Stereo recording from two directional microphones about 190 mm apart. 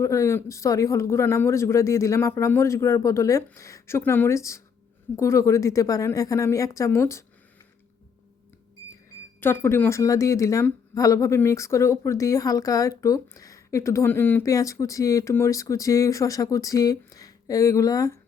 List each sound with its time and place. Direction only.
0.0 s speech: 15° left (ahead or behind)
9.4 s speech: 10° left (ahead or behind)